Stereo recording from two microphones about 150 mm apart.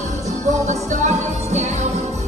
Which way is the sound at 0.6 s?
50° right (ahead or behind).